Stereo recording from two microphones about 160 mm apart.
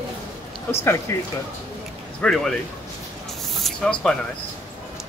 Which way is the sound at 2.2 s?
5° left (ahead or behind).